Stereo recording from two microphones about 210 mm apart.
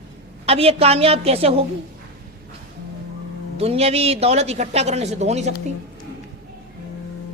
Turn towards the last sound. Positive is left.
turn(degrees=-30)  # may be behind; listen again after turning